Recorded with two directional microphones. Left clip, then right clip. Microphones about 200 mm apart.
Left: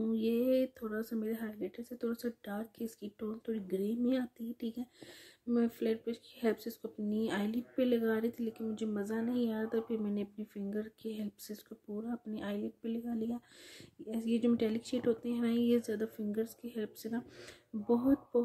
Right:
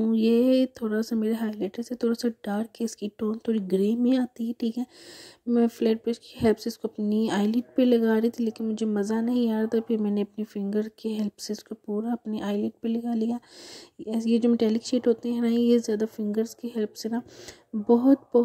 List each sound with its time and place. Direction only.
0.0 s speech: 35° right (ahead or behind)